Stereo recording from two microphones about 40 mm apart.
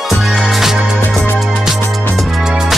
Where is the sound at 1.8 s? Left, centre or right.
Left.